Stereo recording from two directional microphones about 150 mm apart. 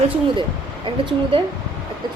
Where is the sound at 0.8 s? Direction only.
35° right (ahead or behind).